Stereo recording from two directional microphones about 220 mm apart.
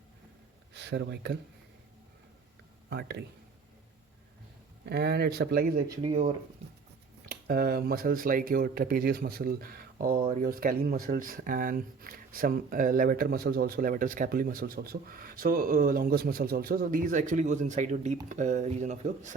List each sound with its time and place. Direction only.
0.7 s speech: 50° right (ahead or behind)
2.9 s speech: 45° right (ahead or behind)
4.9 s speech: 50° right (ahead or behind)
6.0 s speech: 25° right (ahead or behind)
7.3 s speech: 45° right (ahead or behind)